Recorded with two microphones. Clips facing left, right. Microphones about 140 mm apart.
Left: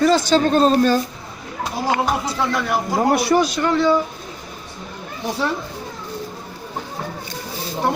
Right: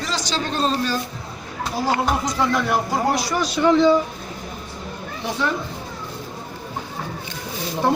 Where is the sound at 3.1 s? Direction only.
60° left (ahead or behind).